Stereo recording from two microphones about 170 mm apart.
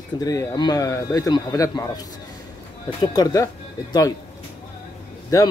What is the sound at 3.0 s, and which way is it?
Speech, 25° left (ahead or behind).